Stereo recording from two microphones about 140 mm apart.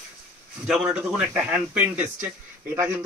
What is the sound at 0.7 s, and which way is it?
Speech, 5° right (ahead or behind).